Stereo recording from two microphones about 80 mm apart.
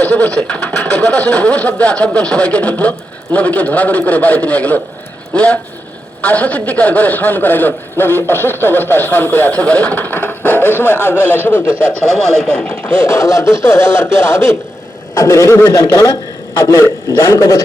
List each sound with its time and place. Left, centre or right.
0.0 s a man's voice: centre
12.0 s speech: centre
12.6 s a man's voice: left
17.2 s a man's voice: left